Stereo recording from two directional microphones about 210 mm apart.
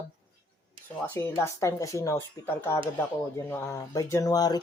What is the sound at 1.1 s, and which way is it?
Speech, 10° left (ahead or behind).